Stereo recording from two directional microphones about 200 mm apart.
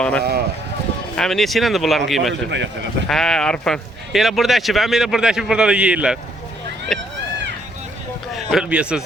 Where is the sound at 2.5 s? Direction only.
60° right (ahead or behind).